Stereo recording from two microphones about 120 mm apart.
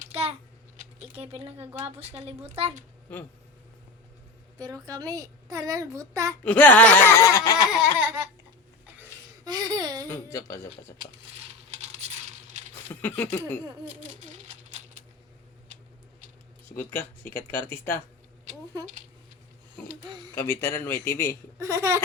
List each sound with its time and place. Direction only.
0.1 s typing: 55° right (ahead or behind)
1.1 s speech: 55° right (ahead or behind)
4.5 s a child's voice: 30° right (ahead or behind)
6.4 s speech: 15° left (ahead or behind); by 7.7 s 30° left (ahead or behind)
7.7 s baby laughter: 10° right (ahead or behind)
9.4 s a sound: 30° right (ahead or behind)
10.1 s a man's voice: 25° left (ahead or behind)
11.8 s coin: 65° right (ahead or behind)
12.9 s speech: 15° left (ahead or behind)
14.2 s coin: 90° right
16.6 s speech: 20° left (ahead or behind)
20.0 s speech: 35° right (ahead or behind)
20.3 s a man's voice: 20° left (ahead or behind)
21.6 s a child's voice: 25° right (ahead or behind)